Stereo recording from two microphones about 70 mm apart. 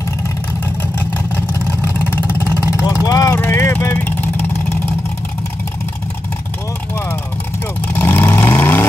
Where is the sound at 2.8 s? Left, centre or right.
Left.